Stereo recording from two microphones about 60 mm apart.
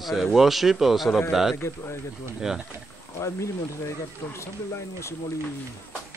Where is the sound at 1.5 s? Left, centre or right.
Left.